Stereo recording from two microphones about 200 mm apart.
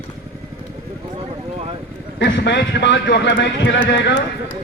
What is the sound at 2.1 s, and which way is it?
A man's voice, 65° left (ahead or behind).